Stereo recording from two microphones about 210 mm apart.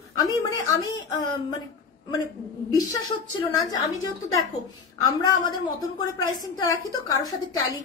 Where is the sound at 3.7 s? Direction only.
15° left (ahead or behind).